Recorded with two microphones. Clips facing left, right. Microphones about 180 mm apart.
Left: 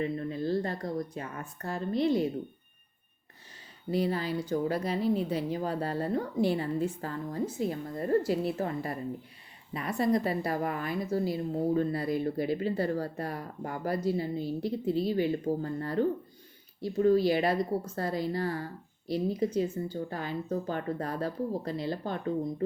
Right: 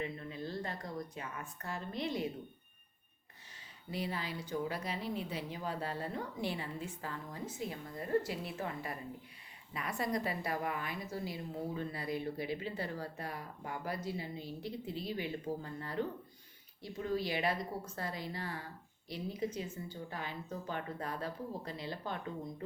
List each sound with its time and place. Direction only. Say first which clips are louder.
0.0 s speech: left 9 dB; 40° left (ahead or behind)
3.9 s a woman's voice: left 10 dB; 35° left (ahead or behind)